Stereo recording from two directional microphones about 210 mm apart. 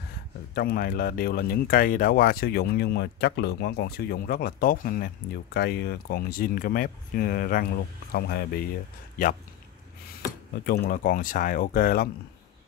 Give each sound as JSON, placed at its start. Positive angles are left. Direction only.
{"t": 0.6, "sound": "speech", "side_deg": 45}
{"t": 10.6, "sound": "speech", "side_deg": 45}